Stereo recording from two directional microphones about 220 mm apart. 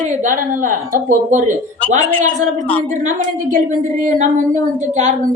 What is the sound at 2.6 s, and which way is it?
A woman's voice, 35° right (ahead or behind).